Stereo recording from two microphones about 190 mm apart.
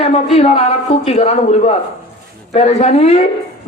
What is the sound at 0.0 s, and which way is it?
A man's voice, 35° left (ahead or behind).